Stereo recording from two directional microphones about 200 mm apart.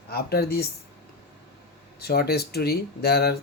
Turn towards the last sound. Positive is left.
turn(degrees=50)  # may be behind; listen again after turning